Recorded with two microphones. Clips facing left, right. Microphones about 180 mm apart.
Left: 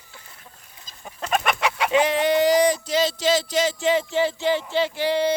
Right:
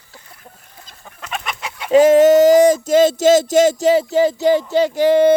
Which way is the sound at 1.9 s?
45° right (ahead or behind).